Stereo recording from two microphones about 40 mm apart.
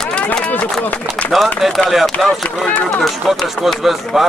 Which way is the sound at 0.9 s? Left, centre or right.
Left.